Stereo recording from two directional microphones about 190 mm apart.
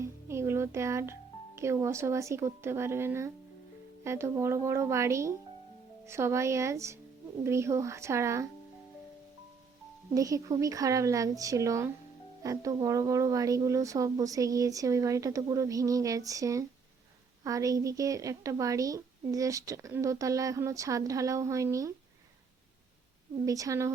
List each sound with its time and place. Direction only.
0.0 s a sound: 15° right (ahead or behind)
1.5 s a woman's voice: 15° right (ahead or behind)
10.2 s a woman's voice: 15° right (ahead or behind)
23.5 s a woman's voice: 15° right (ahead or behind)